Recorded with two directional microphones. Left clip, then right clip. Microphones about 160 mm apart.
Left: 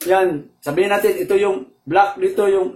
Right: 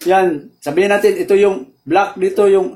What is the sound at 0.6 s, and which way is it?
Speech, 80° right.